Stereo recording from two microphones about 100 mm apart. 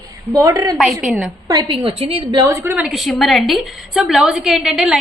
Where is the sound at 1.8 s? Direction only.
60° right (ahead or behind).